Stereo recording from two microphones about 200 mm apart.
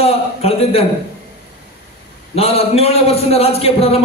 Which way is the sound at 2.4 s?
30° left (ahead or behind).